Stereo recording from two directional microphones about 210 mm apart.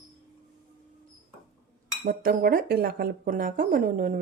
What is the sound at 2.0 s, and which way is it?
Speech, 45° right (ahead or behind).